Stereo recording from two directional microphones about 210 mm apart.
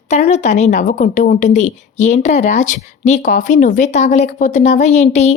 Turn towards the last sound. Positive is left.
turn(degrees=30)  # may be behind; listen again after turning